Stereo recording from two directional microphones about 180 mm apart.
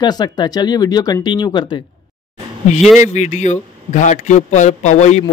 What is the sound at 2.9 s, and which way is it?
A man's voice, 40° left (ahead or behind).